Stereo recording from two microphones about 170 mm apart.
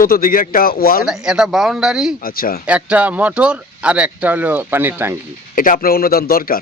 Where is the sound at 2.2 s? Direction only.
60° left (ahead or behind).